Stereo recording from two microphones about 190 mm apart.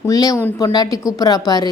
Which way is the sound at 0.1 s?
20° left (ahead or behind).